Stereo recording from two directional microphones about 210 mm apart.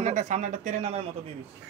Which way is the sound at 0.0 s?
35° right (ahead or behind).